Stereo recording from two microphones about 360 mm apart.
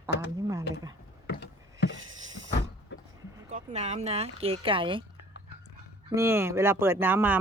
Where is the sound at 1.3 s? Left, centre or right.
Left.